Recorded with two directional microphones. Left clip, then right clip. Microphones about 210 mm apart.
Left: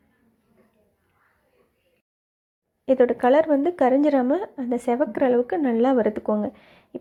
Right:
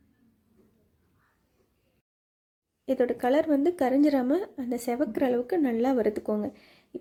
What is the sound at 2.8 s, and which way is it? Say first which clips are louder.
A woman's voice: left 7 dB; centre (ahead or behind).